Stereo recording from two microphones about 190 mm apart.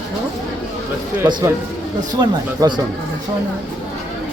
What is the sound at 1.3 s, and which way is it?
Speech, 20° right (ahead or behind).